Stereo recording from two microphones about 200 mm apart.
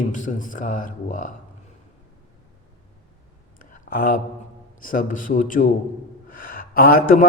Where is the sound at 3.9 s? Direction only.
45° left (ahead or behind).